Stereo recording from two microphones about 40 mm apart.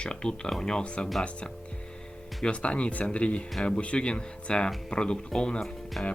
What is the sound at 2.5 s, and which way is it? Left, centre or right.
Speech, left.